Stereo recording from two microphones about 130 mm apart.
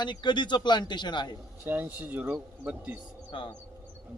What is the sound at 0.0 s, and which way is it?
Speech, 35° left (ahead or behind).